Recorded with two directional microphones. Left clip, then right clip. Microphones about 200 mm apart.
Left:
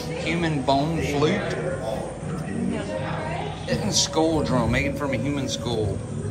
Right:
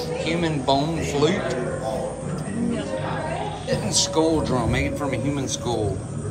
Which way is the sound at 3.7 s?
15° right (ahead or behind).